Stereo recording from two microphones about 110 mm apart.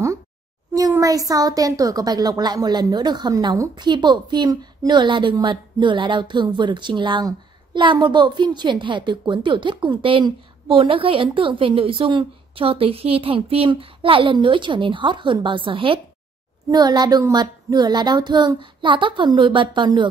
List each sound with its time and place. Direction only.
0.7 s a woman's voice: 35° right (ahead or behind); by 16.0 s 50° right (ahead or behind)
16.7 s speech: 40° right (ahead or behind)